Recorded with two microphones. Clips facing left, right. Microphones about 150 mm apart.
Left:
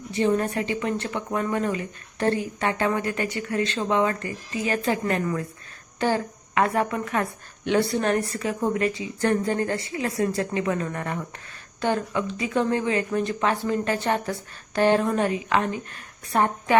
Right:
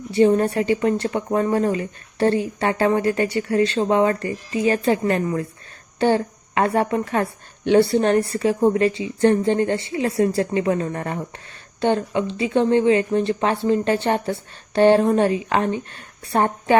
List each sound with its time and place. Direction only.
0.1 s a woman's voice: 35° right (ahead or behind)